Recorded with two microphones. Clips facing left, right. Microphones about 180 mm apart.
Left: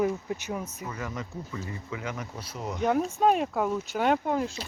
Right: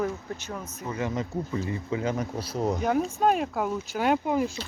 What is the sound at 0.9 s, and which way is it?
Speech, 25° right (ahead or behind).